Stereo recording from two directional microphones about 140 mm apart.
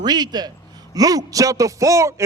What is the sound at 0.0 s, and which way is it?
A man's voice, 30° right (ahead or behind).